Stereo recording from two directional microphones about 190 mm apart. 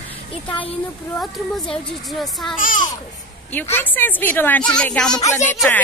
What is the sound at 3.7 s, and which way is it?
Speech, 10° left (ahead or behind).